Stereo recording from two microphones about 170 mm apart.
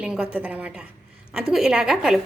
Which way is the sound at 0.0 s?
5° right (ahead or behind).